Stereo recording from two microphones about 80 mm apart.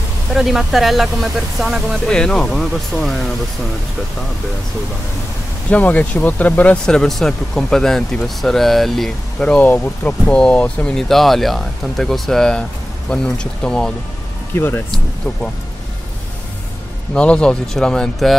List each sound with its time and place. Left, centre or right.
0.3 s speech: centre
2.0 s speech: centre
5.7 s speech: centre
6.9 s speech: centre
9.6 s speech: centre
11.1 s speech: centre
14.5 s speech: left
17.1 s speech: centre